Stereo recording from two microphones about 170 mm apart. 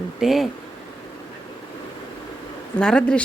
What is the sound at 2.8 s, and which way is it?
Speech, 5° left (ahead or behind).